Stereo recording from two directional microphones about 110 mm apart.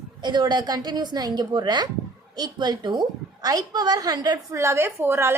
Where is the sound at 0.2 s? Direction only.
40° right (ahead or behind).